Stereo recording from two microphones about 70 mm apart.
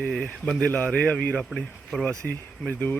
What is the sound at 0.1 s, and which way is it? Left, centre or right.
Speech, centre.